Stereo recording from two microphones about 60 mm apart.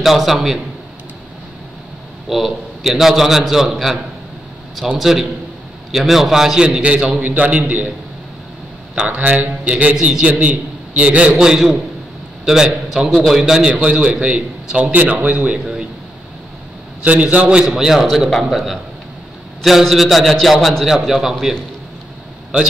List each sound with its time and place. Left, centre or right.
0.0 s a man's voice: centre
2.2 s a man's voice: centre
6.8 s a man's voice: centre
9.0 s a man's voice: right
17.0 s a man's voice: right; by 21.5 s centre